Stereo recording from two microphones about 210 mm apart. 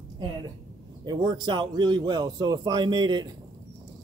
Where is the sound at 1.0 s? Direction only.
20° right (ahead or behind).